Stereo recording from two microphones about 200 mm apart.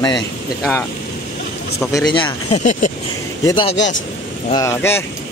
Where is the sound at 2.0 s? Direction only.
25° left (ahead or behind).